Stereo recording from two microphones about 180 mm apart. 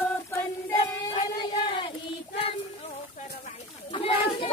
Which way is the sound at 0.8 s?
30° left (ahead or behind).